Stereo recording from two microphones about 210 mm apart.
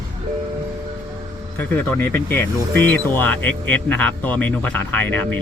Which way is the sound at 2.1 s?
10° left (ahead or behind).